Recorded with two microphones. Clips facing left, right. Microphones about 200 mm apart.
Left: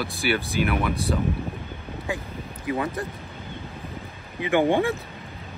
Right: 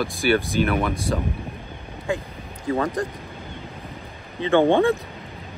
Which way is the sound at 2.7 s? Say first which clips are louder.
Right 3 dB; 15° left (ahead or behind).